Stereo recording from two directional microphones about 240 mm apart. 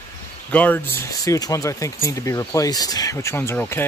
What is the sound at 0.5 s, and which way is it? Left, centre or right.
Speech, centre.